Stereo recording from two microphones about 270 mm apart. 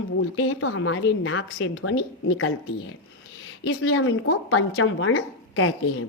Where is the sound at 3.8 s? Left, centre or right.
Left.